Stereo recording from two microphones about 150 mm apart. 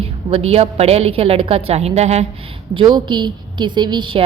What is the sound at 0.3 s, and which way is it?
A woman's voice, 40° right (ahead or behind).